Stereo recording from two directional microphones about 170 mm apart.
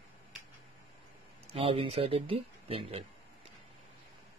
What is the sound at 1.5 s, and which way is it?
Speech, 35° right (ahead or behind).